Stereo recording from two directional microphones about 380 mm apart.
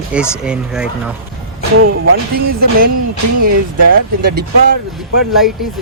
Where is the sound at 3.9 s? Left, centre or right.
Right.